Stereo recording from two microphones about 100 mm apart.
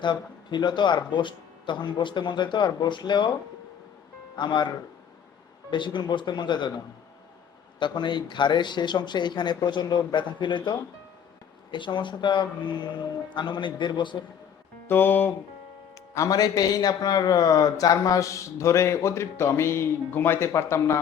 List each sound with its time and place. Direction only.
0.0 s speech: 50° left (ahead or behind)
4.4 s speech: 50° left (ahead or behind)
5.7 s speech: 50° left (ahead or behind)
7.8 s speech: 50° left (ahead or behind)
14.8 s music: 20° left (ahead or behind)
16.1 s a man's voice: 35° left (ahead or behind)